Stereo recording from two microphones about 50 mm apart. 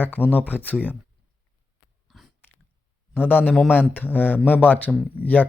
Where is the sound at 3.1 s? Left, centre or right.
Left.